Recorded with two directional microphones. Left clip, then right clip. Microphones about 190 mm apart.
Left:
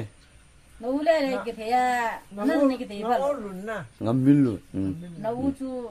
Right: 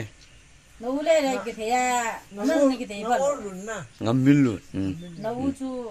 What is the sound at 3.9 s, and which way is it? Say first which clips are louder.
Speech: right 1 dB; centre (ahead or behind).